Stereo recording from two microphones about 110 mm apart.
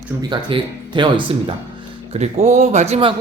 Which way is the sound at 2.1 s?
90° right.